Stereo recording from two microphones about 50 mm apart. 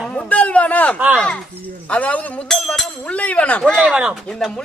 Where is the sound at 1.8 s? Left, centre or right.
Left.